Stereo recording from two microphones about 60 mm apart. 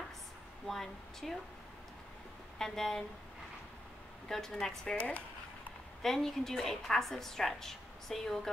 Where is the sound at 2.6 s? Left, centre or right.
Centre.